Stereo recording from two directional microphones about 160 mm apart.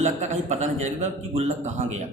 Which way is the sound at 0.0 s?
45° right (ahead or behind).